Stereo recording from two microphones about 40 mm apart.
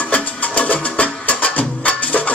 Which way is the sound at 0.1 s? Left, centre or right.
Left.